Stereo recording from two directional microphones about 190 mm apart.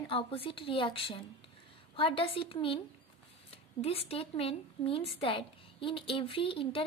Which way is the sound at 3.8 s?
30° left (ahead or behind).